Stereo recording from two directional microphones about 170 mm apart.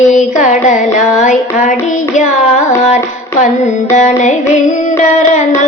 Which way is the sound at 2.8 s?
45° left (ahead or behind).